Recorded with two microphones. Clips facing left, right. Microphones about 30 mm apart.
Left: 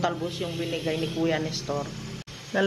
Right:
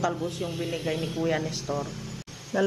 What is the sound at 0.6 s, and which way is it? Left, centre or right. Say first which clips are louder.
Speech: left 2 dB; centre.